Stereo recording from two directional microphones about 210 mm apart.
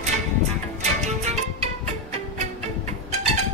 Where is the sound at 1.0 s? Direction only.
30° right (ahead or behind).